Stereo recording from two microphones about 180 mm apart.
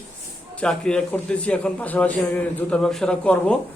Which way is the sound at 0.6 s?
5° left (ahead or behind).